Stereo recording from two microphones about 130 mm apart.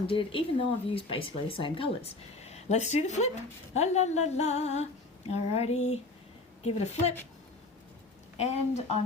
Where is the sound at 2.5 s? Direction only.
60° left (ahead or behind).